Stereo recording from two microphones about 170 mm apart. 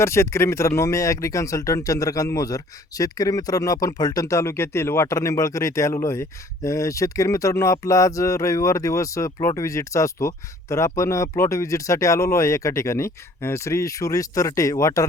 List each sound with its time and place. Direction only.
0.0 s speech: 15° left (ahead or behind)